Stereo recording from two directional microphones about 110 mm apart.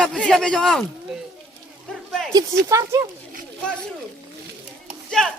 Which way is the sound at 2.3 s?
35° right (ahead or behind).